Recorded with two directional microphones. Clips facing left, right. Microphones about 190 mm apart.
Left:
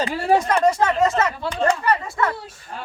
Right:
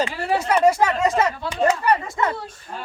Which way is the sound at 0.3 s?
10° right (ahead or behind).